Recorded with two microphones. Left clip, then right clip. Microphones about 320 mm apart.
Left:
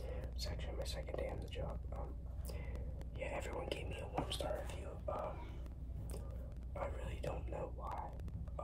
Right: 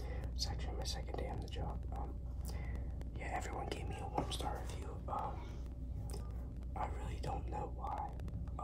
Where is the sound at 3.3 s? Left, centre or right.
Centre.